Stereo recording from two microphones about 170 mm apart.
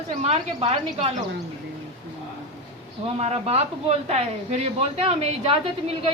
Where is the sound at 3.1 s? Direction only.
35° right (ahead or behind).